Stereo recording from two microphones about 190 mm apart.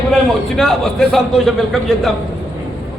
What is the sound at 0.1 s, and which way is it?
A man's voice, centre (ahead or behind).